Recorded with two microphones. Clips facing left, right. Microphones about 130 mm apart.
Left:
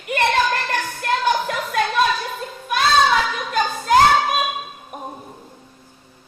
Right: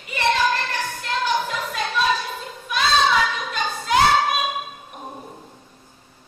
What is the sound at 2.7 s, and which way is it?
Child singing, 50° left (ahead or behind).